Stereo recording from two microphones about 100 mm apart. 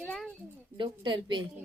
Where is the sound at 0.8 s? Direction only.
50° right (ahead or behind).